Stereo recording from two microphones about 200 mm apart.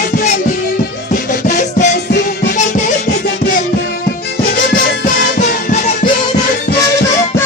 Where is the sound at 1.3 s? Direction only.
40° left (ahead or behind).